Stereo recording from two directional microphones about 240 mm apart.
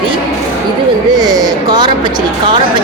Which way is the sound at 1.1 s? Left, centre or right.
Centre.